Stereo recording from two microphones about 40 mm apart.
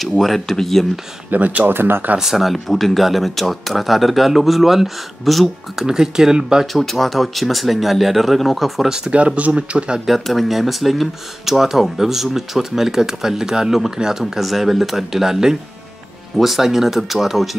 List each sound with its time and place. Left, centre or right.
0.2 s speech: centre
1.3 s speech: right
1.7 s speech: right
2.1 s speech: centre
5.9 s speech: centre
6.6 s speech: centre
8.8 s speech: centre
9.1 s speech: right
10.0 s speech: centre